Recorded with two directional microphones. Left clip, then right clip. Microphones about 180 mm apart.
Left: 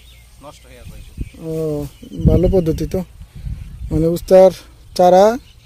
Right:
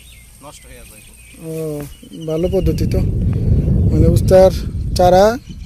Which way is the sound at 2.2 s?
20° left (ahead or behind).